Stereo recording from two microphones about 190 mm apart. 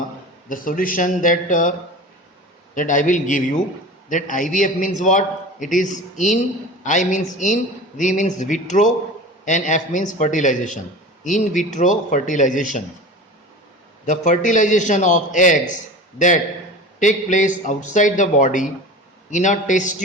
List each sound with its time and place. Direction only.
0.4 s speech: 45° left (ahead or behind)
2.7 s a man's voice: 40° left (ahead or behind)
14.0 s a man's voice: 40° left (ahead or behind)